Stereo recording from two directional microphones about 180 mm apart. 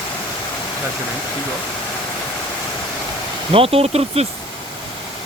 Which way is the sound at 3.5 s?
30° right (ahead or behind).